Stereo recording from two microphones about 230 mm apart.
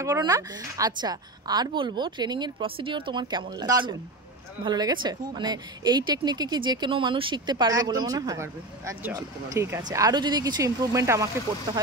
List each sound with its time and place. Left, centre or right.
0.0 s a woman's voice: centre